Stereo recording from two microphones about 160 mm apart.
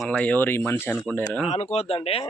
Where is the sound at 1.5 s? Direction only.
40° left (ahead or behind).